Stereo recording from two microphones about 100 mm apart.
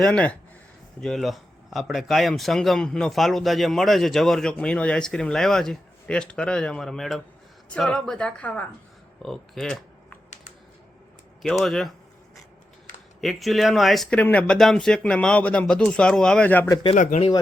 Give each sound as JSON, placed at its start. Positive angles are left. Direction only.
{"t": 0.0, "sound": "speech", "side_deg": 10}
{"t": 9.2, "sound": "speech", "side_deg": 5}
{"t": 11.6, "sound": "speech", "side_deg": 0}
{"t": 13.2, "sound": "speech", "side_deg": 0}
{"t": 14.2, "sound": "speech", "side_deg": 15}
{"t": 16.8, "sound": "speech", "side_deg": 75}